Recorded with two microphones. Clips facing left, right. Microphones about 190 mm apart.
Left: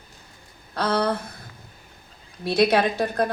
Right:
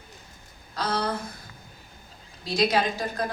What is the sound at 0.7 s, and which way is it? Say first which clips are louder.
Speech: left 5 dB; 60° left (ahead or behind).